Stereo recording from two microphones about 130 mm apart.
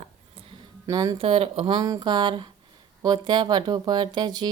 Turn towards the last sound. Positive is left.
turn(degrees=-35)  # may be behind; listen again after turning